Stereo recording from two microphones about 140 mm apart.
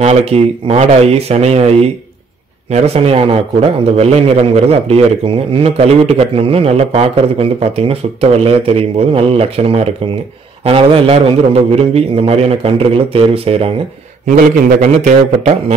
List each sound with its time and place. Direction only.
0.0 s a man's voice: 50° right (ahead or behind)
14.3 s a man's voice: 65° right (ahead or behind)